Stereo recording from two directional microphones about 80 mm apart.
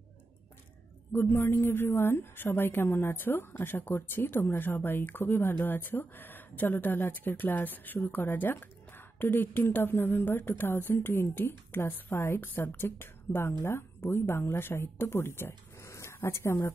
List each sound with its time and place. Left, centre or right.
1.1 s speech: left